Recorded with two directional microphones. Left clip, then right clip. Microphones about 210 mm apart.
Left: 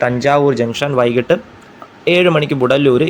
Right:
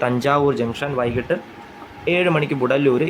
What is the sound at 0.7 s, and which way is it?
Speech, 25° left (ahead or behind).